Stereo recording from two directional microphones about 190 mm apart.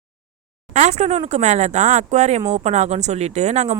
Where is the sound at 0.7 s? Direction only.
35° right (ahead or behind).